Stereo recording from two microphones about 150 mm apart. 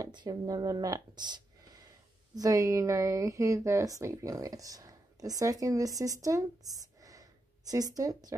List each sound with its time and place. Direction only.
0.0 s a woman's voice: 30° right (ahead or behind)